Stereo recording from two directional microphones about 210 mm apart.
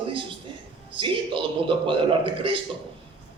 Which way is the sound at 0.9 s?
25° right (ahead or behind).